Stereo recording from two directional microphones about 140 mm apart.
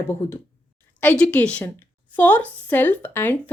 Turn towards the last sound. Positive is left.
turn(degrees=15)  # may be behind; listen again after turning